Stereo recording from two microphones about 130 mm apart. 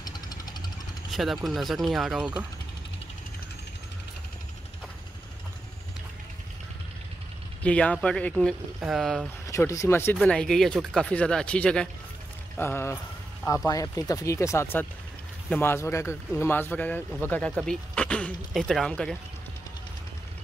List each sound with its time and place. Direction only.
0.0 s engine knocking: 30° left (ahead or behind)
1.1 s speech: centre (ahead or behind)
7.6 s speech: 10° left (ahead or behind)
9.5 s speech: 25° left (ahead or behind)
10.1 s speech: 5° left (ahead or behind)
12.5 s speech: 20° left (ahead or behind)